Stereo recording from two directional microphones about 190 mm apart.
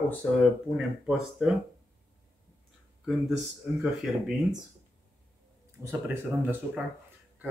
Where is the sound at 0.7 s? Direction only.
5° right (ahead or behind).